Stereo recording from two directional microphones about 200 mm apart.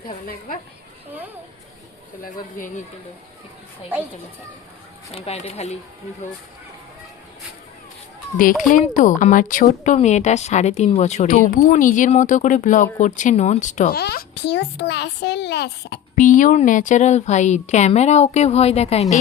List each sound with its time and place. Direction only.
2.2 s speech: 45° left (ahead or behind)
3.9 s speech: 10° right (ahead or behind)
5.1 s speech: 30° left (ahead or behind)
8.7 s speech: 40° left (ahead or behind)
14.0 s a child's voice: 55° left (ahead or behind)
16.1 s speech: 40° left (ahead or behind)